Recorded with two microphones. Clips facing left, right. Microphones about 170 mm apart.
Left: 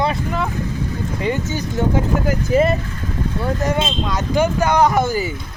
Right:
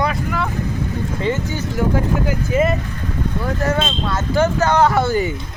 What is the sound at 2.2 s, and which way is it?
Speech, 35° left (ahead or behind).